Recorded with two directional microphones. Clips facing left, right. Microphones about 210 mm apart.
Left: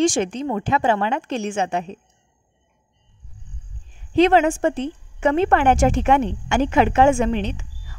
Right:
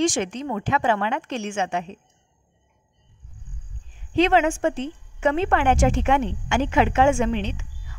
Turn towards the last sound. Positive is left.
turn(degrees=40)  # may be behind; listen again after turning